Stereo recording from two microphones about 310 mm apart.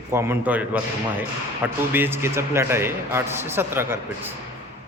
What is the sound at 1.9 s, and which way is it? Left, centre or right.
Speech, centre.